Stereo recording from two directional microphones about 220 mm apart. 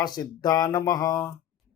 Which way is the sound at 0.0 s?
20° left (ahead or behind).